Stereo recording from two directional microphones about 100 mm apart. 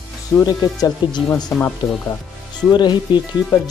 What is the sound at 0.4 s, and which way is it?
Speech, 40° left (ahead or behind).